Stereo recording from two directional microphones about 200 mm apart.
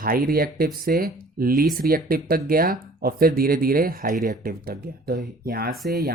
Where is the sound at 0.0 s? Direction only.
45° right (ahead or behind).